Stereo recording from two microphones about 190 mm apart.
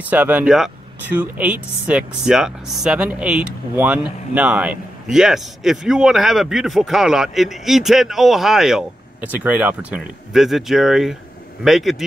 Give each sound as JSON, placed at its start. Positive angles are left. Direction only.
{"t": 0.0, "sound": "speech", "side_deg": -10}